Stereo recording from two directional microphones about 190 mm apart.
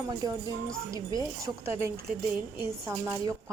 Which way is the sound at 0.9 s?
20° right (ahead or behind).